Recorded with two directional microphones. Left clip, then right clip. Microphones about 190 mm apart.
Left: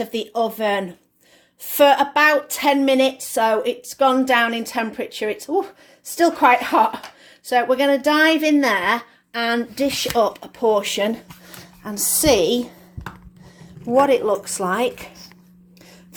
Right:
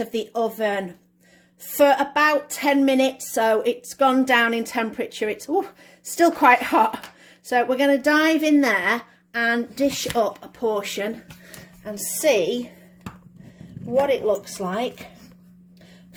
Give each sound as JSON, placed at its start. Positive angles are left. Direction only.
{"t": 0.0, "sound": "a woman's voice", "side_deg": 0}
{"t": 11.8, "sound": "speech", "side_deg": 30}
{"t": 14.0, "sound": "speech", "side_deg": 25}